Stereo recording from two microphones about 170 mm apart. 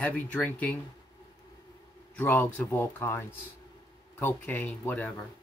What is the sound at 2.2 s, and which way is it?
Speech, 10° left (ahead or behind).